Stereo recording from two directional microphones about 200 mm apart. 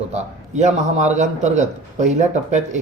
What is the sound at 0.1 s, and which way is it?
A man's voice, 35° right (ahead or behind).